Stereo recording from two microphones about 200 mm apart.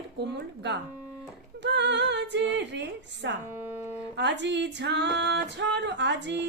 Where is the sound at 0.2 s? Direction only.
60° right (ahead or behind).